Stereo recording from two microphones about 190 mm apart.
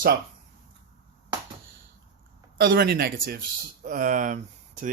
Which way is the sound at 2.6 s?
55° right (ahead or behind).